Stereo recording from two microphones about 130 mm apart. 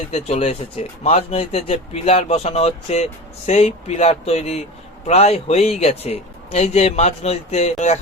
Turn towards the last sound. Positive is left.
turn(degrees=65)  # may be behind; listen again after turning